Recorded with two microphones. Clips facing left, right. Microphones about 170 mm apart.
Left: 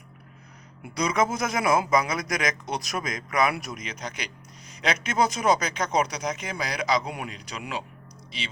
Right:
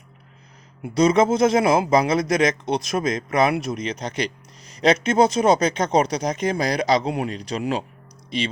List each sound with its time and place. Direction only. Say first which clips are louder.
0.8 s speech: right 8 dB; 30° right (ahead or behind)